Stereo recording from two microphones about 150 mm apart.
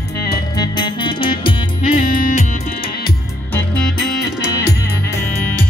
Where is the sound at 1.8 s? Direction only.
60° left (ahead or behind).